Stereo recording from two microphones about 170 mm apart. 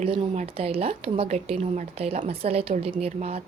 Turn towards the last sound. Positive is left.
turn(degrees=-35)  # may be behind; listen again after turning